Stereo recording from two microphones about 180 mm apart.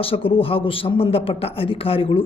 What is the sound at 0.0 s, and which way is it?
A man's voice, 30° left (ahead or behind).